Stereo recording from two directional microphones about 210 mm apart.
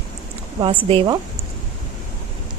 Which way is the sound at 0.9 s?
25° right (ahead or behind).